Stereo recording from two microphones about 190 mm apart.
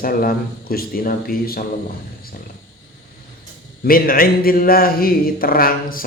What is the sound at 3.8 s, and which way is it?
Speech, 50° left (ahead or behind).